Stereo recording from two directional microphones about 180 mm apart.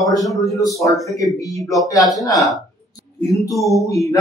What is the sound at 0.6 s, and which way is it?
A man's voice, 20° left (ahead or behind).